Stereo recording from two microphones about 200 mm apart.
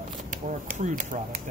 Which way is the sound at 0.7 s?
40° right (ahead or behind).